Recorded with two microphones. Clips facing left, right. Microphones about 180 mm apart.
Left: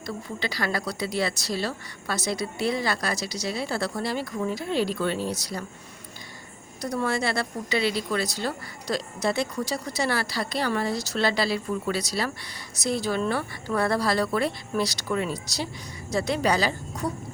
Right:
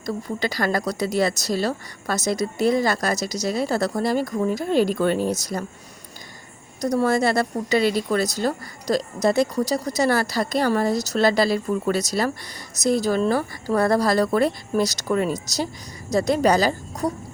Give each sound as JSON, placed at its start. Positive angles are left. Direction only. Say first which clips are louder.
{"t": 0.0, "sound": "a woman's voice", "louder": "right 6 dB", "side_deg": -45}
{"t": 6.8, "sound": "a woman's voice", "louder": "right 7 dB", "side_deg": -40}